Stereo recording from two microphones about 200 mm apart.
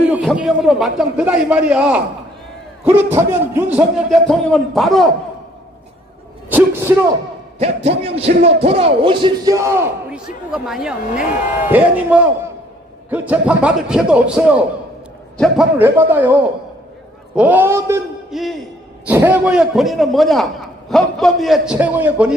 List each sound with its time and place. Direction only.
0.0 s a man's voice: 5° right (ahead or behind)
3.2 s a man's voice: 10° right (ahead or behind)
6.5 s speech: 10° right (ahead or behind)
7.6 s speech: 30° right (ahead or behind)
10.1 s a man's voice: 5° right (ahead or behind)
18.3 s a man's voice: centre (ahead or behind)